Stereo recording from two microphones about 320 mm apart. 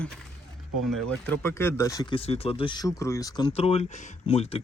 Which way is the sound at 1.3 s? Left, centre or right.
Centre.